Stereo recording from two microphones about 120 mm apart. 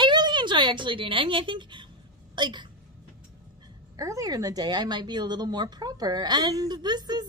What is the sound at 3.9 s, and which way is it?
A woman's voice, 25° right (ahead or behind).